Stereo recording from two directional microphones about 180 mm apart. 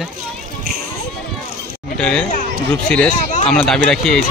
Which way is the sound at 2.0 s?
5° left (ahead or behind).